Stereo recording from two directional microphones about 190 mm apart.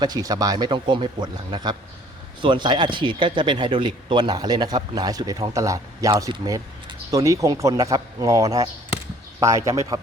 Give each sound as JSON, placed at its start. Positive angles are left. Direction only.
{"t": 0.0, "sound": "speech", "side_deg": -20}
{"t": 9.6, "sound": "speech", "side_deg": -15}